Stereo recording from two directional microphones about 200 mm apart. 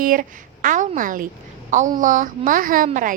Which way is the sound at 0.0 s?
45° right (ahead or behind).